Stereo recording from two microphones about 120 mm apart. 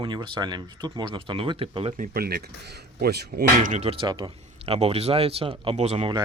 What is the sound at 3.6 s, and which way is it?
Speech, 90° right.